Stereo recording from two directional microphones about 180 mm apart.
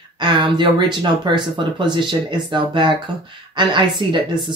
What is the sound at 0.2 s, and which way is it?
Speech, 25° right (ahead or behind).